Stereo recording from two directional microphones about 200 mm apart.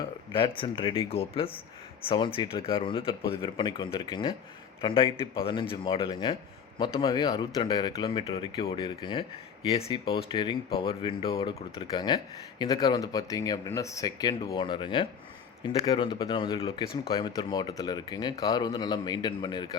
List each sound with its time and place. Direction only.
0.3 s speech: 25° left (ahead or behind)